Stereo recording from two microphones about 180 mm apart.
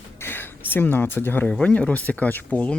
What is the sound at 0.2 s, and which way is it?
Speech, 10° left (ahead or behind).